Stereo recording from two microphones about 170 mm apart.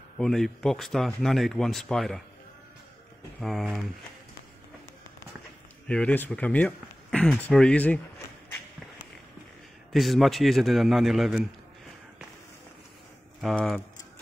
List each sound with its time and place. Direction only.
0.2 s speech: 5° left (ahead or behind)
3.3 s speech: centre (ahead or behind)
5.9 s speech: 5° left (ahead or behind)
9.9 s speech: centre (ahead or behind)
13.4 s speech: centre (ahead or behind)